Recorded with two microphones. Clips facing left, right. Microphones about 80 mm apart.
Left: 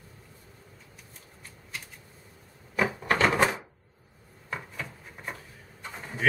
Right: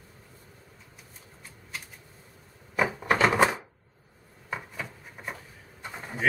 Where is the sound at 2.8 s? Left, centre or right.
Centre.